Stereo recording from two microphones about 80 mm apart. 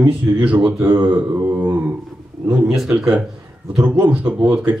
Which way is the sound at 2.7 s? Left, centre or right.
Centre.